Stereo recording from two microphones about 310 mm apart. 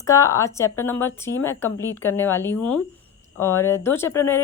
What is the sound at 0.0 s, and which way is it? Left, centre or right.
A woman's voice, centre.